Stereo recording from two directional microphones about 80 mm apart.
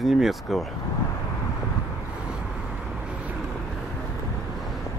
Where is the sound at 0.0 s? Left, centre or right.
Centre.